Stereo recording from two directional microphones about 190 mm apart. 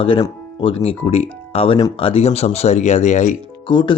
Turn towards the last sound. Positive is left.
turn(degrees=25)  # may be behind; listen again after turning